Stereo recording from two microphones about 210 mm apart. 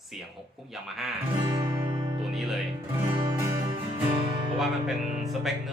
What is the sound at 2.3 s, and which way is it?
Speech, centre (ahead or behind).